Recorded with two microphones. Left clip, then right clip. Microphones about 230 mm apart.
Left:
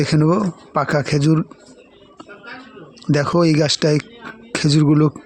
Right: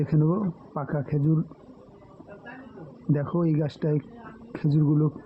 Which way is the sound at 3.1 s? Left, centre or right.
Left.